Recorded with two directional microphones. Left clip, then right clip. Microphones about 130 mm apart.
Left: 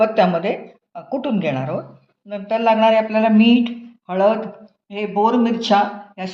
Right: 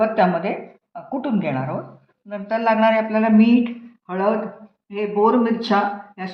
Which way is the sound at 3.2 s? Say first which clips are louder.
Left 2 dB; 35° left (ahead or behind).